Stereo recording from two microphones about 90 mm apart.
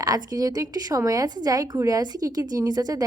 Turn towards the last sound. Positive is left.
turn(degrees=-45)  # may be behind; listen again after turning